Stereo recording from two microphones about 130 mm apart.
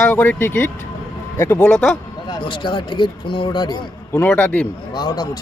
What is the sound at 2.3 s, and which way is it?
Speech, 40° left (ahead or behind).